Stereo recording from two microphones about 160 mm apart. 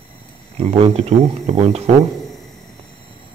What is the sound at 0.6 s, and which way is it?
Speech, 40° right (ahead or behind).